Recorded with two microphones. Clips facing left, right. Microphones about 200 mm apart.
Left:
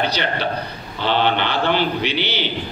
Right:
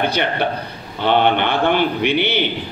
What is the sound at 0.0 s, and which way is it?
A man's voice, 55° right (ahead or behind).